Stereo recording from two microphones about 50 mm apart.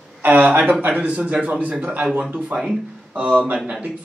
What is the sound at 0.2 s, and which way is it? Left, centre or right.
A woman's voice, right.